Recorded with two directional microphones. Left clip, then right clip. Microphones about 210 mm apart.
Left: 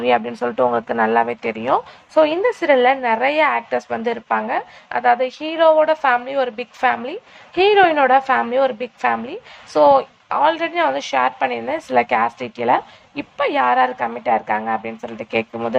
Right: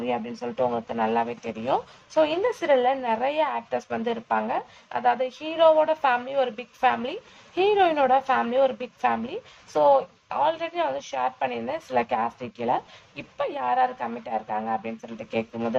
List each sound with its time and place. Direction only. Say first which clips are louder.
0.0 s a woman's voice: left 11 dB; 15° left (ahead or behind)